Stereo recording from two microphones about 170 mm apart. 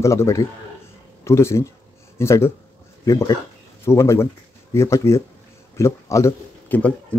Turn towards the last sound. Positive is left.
turn(degrees=10)  # may be behind; listen again after turning